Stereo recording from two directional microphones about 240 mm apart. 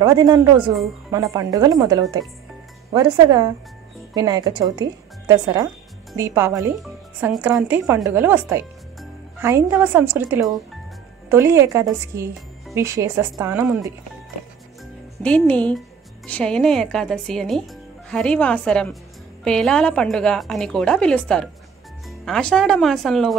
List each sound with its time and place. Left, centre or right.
0.0 s speech: centre
15.2 s a woman's voice: centre